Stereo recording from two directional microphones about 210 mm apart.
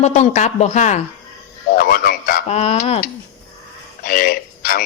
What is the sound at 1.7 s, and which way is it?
Speech, 45° left (ahead or behind).